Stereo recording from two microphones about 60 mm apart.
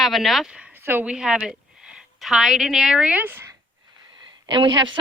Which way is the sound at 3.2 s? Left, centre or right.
Right.